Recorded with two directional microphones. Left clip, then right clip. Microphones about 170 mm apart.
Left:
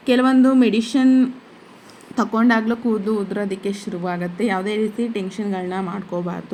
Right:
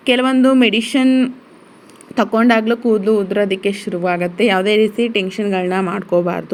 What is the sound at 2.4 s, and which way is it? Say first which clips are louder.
A woman's voice: right 4 dB; 20° right (ahead or behind).